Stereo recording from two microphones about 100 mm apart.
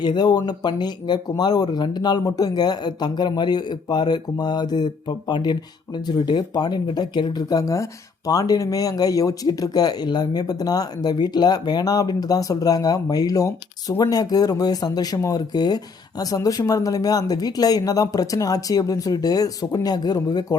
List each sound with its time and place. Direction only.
0.0 s speech: 45° left (ahead or behind)